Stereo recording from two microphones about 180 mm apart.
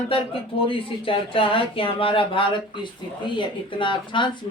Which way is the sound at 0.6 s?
30° left (ahead or behind).